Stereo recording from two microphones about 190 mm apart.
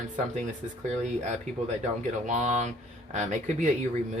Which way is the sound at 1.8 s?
40° right (ahead or behind).